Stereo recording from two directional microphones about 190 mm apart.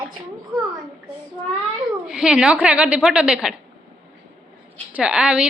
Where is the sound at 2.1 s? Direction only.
5° right (ahead or behind).